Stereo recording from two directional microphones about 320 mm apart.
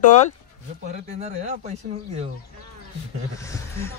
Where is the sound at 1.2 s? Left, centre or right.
Centre.